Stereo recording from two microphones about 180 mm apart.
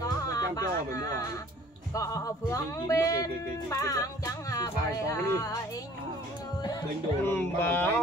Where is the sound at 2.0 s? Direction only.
15° left (ahead or behind).